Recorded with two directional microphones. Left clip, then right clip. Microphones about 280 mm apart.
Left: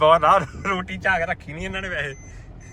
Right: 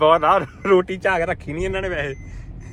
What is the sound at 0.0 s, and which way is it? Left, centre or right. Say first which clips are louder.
Speech: even; centre.